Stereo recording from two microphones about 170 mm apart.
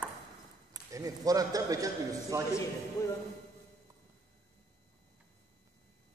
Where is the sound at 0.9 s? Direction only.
20° right (ahead or behind).